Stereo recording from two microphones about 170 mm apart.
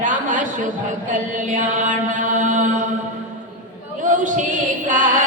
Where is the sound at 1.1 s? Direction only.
50° right (ahead or behind).